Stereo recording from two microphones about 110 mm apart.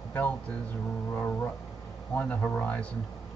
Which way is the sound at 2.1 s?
15° left (ahead or behind).